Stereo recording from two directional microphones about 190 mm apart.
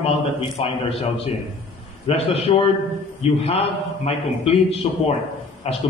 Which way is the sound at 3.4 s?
35° left (ahead or behind).